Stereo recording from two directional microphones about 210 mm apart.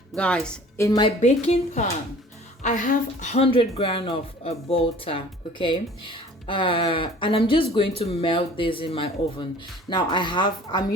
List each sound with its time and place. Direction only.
0.1 s a woman's voice: 5° left (ahead or behind)
1.2 s speech: 30° left (ahead or behind)